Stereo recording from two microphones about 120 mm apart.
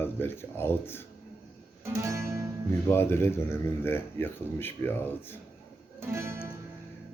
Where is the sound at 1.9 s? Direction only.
25° right (ahead or behind).